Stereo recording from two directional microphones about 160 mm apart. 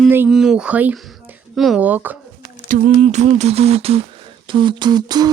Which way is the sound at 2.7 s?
55° right (ahead or behind).